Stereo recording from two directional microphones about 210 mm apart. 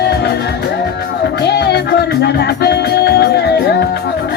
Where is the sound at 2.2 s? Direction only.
50° left (ahead or behind).